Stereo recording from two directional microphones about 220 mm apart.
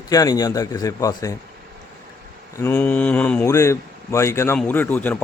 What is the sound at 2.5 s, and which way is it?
A man's voice, 10° left (ahead or behind).